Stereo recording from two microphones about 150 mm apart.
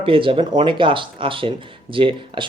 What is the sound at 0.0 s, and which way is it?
Speech, 35° right (ahead or behind).